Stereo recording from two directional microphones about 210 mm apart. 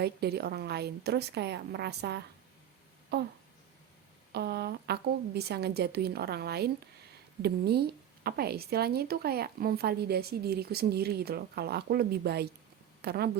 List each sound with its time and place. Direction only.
0.0 s speech: 50° right (ahead or behind)
4.3 s speech: 50° right (ahead or behind)